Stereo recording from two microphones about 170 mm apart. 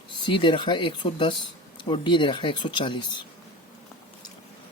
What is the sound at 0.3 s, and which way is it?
Speech, 30° left (ahead or behind).